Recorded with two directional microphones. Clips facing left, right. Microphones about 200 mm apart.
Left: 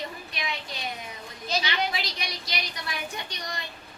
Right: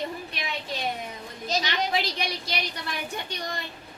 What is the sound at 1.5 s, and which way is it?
Speech, 45° right (ahead or behind).